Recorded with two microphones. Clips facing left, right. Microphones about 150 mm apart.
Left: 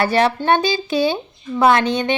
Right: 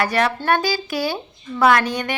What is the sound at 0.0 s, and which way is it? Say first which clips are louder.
A woman's voice: left 3 dB; 30° left (ahead or behind).